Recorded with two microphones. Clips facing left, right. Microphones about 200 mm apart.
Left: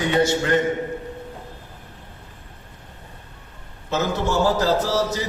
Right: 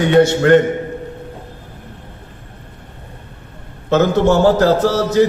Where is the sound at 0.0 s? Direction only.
60° right (ahead or behind).